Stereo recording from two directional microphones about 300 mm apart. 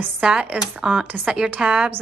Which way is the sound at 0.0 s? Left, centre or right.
Centre.